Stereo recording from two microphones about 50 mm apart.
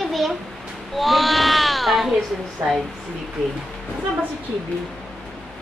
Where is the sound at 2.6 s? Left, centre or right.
Right.